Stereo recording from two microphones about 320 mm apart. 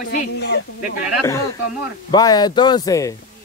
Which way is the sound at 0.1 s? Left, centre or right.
Left.